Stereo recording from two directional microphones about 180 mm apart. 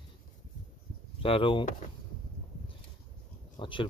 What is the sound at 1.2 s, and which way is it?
Speech, 30° left (ahead or behind).